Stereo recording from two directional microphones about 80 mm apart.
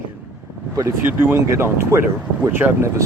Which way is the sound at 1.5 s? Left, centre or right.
Right.